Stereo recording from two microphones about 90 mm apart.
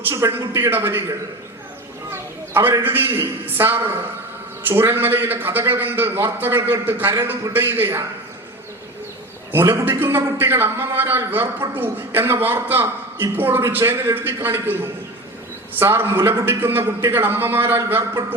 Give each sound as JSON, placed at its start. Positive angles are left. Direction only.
{"t": 0.1, "sound": "a man's voice", "side_deg": -30}
{"t": 2.1, "sound": "a sound", "side_deg": -25}
{"t": 2.8, "sound": "a man's voice", "side_deg": -25}
{"t": 9.6, "sound": "a man's voice", "side_deg": -30}